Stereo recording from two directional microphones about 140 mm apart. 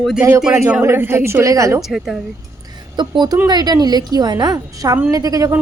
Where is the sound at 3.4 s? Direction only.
30° right (ahead or behind).